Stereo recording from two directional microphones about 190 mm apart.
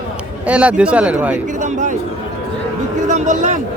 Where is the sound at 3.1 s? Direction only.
40° right (ahead or behind).